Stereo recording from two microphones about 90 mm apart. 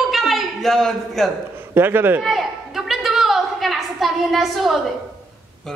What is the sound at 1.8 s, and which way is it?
Speech, 20° right (ahead or behind).